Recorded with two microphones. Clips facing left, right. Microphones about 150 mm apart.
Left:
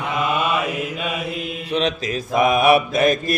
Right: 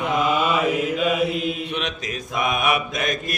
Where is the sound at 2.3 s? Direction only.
35° left (ahead or behind).